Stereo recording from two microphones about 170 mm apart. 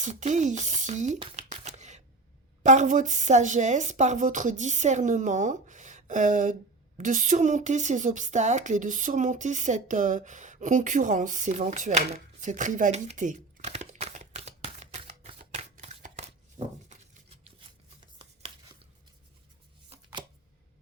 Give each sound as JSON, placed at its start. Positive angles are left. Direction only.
{"t": 0.0, "sound": "speech", "side_deg": -45}
{"t": 1.2, "sound": "a sound", "side_deg": -40}
{"t": 2.6, "sound": "a woman's voice", "side_deg": -45}
{"t": 18.2, "sound": "chopping", "side_deg": -30}